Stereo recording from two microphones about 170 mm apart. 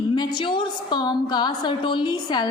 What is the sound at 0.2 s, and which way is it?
A woman's voice, 25° left (ahead or behind).